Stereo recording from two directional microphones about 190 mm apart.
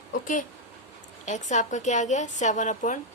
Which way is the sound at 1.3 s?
40° left (ahead or behind).